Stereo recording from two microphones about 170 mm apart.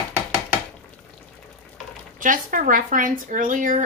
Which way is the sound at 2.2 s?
55° right (ahead or behind).